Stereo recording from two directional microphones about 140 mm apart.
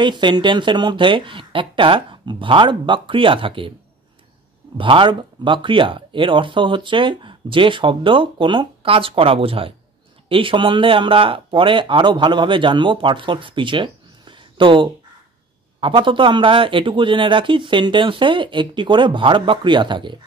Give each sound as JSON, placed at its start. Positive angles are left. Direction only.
{"t": 0.0, "sound": "speech", "side_deg": -35}
{"t": 4.7, "sound": "speech", "side_deg": -35}